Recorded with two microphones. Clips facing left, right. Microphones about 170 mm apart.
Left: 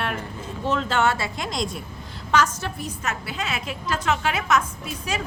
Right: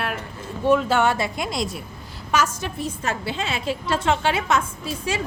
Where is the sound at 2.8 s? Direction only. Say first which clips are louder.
Right 7 dB; 30° right (ahead or behind).